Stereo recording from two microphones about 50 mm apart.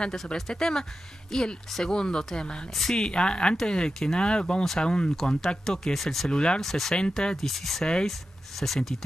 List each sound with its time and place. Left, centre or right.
0.1 s speech: centre
2.7 s speech: centre
3.0 s speech: centre
6.6 s speech: centre
7.3 s speech: centre
7.8 s speech: centre
8.1 s speech: centre